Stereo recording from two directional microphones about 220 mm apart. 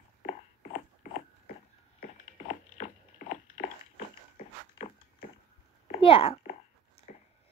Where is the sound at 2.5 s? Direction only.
30° left (ahead or behind).